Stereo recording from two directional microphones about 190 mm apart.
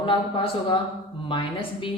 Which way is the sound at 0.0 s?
25° left (ahead or behind).